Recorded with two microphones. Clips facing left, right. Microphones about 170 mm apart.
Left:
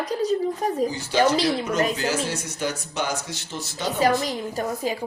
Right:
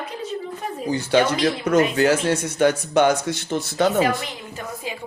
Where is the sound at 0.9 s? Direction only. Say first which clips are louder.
Right 7 dB; 60° right (ahead or behind).